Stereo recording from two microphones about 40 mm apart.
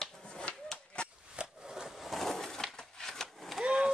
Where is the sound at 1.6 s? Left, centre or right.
Centre.